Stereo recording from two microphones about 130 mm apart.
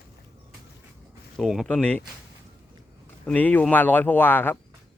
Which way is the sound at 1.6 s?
10° left (ahead or behind).